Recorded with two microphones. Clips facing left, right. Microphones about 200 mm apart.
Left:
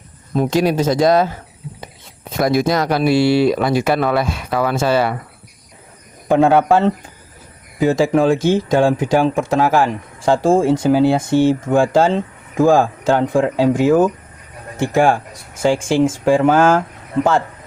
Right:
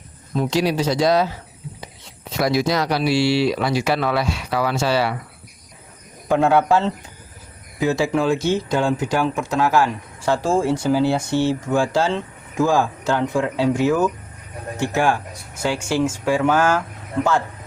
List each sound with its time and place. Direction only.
0.5 s speech: 50° left (ahead or behind)
6.2 s speech: 50° left (ahead or behind)